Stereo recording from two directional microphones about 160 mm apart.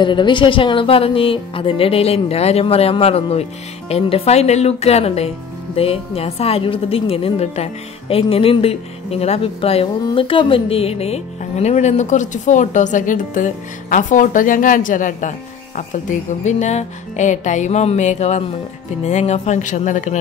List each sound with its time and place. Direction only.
0.0 s a woman's voice: 30° left (ahead or behind); by 20.2 s 50° left (ahead or behind)